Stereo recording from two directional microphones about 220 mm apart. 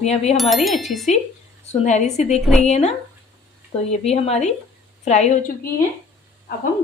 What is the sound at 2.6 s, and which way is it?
Speech, 30° left (ahead or behind).